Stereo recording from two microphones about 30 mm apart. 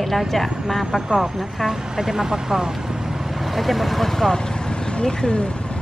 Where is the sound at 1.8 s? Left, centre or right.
Right.